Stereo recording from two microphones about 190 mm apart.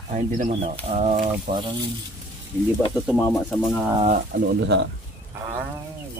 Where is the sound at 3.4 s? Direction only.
5° right (ahead or behind).